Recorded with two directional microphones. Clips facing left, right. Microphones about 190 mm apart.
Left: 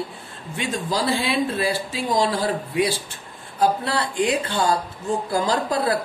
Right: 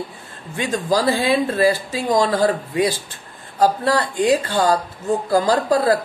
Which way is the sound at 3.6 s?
40° right (ahead or behind).